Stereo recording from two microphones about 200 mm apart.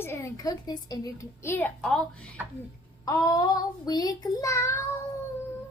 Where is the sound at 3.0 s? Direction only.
15° left (ahead or behind).